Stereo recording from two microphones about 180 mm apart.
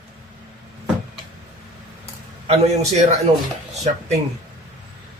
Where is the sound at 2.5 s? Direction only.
40° right (ahead or behind).